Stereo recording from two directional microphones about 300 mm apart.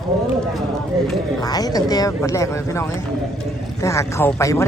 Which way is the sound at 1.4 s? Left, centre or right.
Centre.